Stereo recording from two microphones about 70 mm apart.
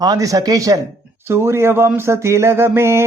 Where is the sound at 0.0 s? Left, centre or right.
Right.